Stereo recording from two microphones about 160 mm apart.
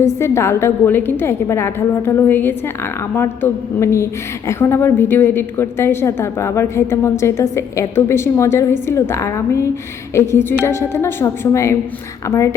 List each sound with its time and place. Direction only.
0.0 s a woman's voice: 15° left (ahead or behind)